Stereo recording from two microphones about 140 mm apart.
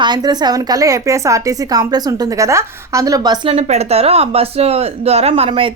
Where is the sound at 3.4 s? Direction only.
45° right (ahead or behind).